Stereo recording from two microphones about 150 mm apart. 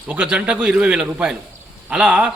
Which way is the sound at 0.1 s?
10° right (ahead or behind).